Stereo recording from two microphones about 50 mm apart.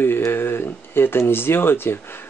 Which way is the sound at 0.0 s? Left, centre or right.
Left.